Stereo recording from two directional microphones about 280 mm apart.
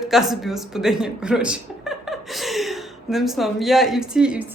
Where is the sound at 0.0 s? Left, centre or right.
Centre.